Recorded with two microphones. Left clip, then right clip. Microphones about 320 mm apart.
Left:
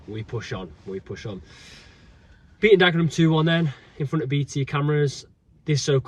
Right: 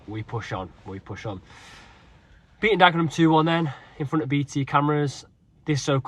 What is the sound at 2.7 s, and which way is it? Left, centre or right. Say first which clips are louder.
Speech: left 1 dB; centre.